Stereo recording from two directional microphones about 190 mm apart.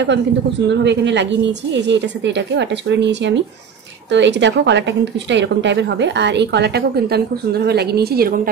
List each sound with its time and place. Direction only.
0.0 s a woman's voice: 65° right (ahead or behind)